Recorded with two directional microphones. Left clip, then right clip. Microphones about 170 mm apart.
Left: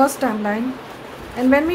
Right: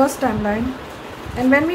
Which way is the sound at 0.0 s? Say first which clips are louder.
Even; 10° left (ahead or behind).